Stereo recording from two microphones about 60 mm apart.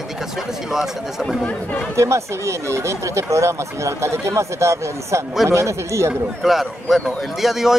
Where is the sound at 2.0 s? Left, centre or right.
Right.